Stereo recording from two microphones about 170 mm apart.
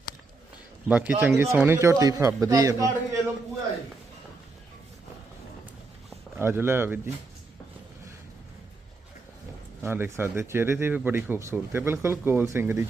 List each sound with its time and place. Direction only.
0.9 s a man's voice: 10° right (ahead or behind)
6.4 s speech: 15° right (ahead or behind)
9.8 s speech: 15° right (ahead or behind)